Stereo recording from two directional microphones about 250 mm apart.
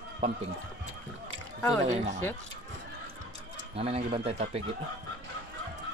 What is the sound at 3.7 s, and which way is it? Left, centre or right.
Speech, right.